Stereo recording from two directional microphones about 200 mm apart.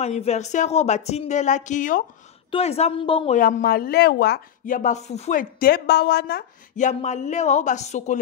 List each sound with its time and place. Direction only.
0.0 s a woman's voice: 35° left (ahead or behind)
3.3 s speech: 45° left (ahead or behind)
6.9 s speech: 35° left (ahead or behind)